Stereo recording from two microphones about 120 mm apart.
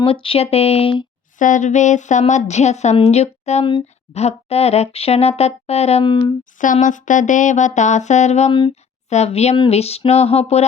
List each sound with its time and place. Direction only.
0.0 s speech: 50° left (ahead or behind)
1.4 s a woman's voice: 90° left; by 6.1 s 60° left (ahead or behind)
6.1 s a woman's voice: 40° left (ahead or behind)
6.6 s music: 90° left; by 8.5 s 70° left (ahead or behind)
9.0 s speech: 65° left (ahead or behind)